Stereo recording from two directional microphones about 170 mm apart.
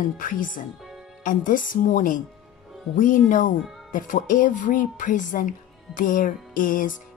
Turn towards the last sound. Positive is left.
turn(degrees=50)  # may be behind; listen again after turning